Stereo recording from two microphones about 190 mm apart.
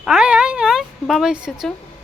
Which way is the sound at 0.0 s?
5° right (ahead or behind).